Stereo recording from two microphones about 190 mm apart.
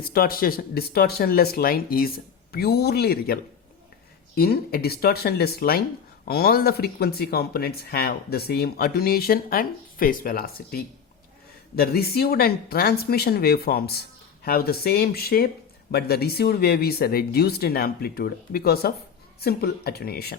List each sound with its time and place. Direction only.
0.1 s speech: 50° left (ahead or behind)
4.4 s speech: 55° left (ahead or behind)